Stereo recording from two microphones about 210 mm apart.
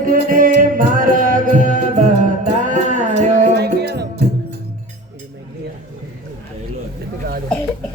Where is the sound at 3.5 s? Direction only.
50° right (ahead or behind).